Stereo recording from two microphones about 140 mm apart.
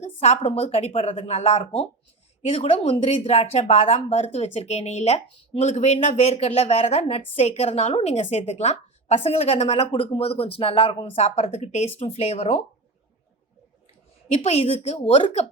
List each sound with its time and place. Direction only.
0.0 s speech: 50° left (ahead or behind)
14.4 s speech: 50° left (ahead or behind)